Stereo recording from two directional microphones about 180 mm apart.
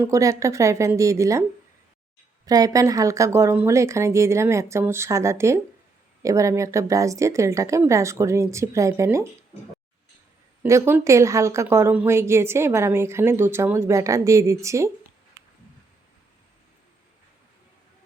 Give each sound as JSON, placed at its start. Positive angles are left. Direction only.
{"t": 0.0, "sound": "speech", "side_deg": -15}
{"t": 2.5, "sound": "speech", "side_deg": -20}
{"t": 10.6, "sound": "speech", "side_deg": -15}